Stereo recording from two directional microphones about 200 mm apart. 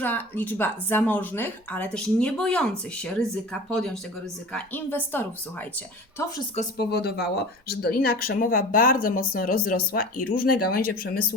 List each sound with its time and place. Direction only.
0.0 s a woman's voice: 10° left (ahead or behind)
6.7 s speech: 55° left (ahead or behind)